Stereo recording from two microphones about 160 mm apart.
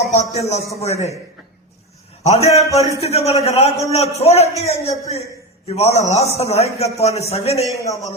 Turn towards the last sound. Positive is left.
turn(degrees=20)  # may be behind; listen again after turning